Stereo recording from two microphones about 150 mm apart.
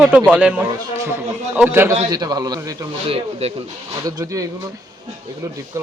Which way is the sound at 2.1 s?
25° right (ahead or behind).